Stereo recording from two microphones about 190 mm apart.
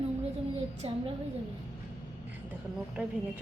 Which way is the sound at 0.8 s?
30° right (ahead or behind).